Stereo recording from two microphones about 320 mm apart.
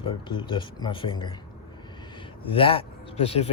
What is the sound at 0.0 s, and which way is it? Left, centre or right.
Speech, centre.